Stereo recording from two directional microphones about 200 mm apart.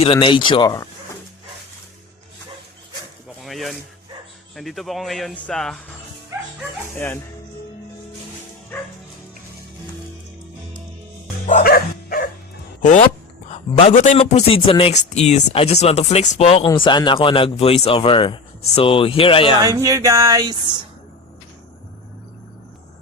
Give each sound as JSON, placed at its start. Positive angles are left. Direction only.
{"t": 0.0, "sound": "a man's voice", "side_deg": 25}
{"t": 3.4, "sound": "a sound", "side_deg": 0}
{"t": 4.5, "sound": "speech", "side_deg": 0}
{"t": 6.9, "sound": "speech", "side_deg": 10}
{"t": 11.4, "sound": "music", "side_deg": 45}
{"t": 12.8, "sound": "a man's voice", "side_deg": 40}
{"t": 19.6, "sound": "speech", "side_deg": -15}